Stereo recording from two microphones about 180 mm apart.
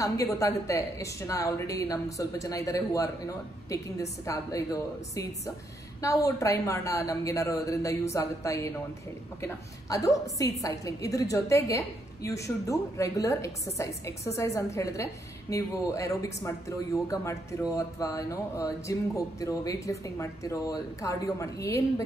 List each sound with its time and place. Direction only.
0.0 s speech: 15° left (ahead or behind)